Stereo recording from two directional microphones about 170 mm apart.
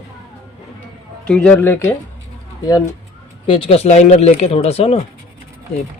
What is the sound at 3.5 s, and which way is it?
Speech, 35° left (ahead or behind).